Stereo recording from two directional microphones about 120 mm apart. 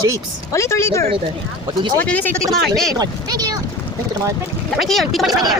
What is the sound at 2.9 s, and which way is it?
Speech, 30° right (ahead or behind).